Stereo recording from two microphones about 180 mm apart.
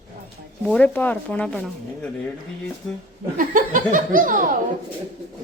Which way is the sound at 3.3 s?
50° right (ahead or behind).